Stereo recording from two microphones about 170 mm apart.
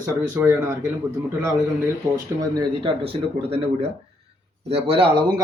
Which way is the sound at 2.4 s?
20° right (ahead or behind).